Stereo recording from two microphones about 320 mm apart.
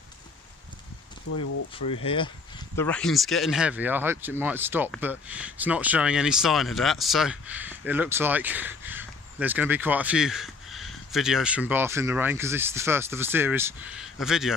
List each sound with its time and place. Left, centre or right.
2.0 s speech: centre